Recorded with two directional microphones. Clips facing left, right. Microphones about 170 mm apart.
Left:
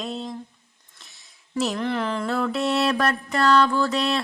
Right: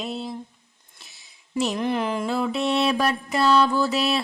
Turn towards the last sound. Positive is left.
turn(degrees=-5)  # may be behind; listen again after turning